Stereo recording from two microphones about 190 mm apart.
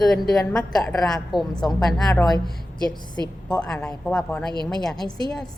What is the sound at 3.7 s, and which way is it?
A woman's voice, 5° left (ahead or behind).